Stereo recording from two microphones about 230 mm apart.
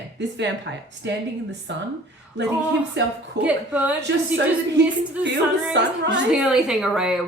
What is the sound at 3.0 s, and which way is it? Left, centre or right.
Speech, right.